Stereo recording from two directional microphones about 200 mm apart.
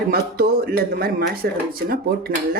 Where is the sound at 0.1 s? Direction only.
50° right (ahead or behind).